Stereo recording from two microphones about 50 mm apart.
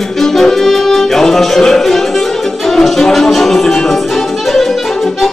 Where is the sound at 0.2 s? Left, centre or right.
Centre.